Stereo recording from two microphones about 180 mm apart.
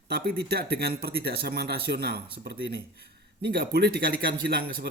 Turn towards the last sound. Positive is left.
turn(degrees=-65)  # may be behind; listen again after turning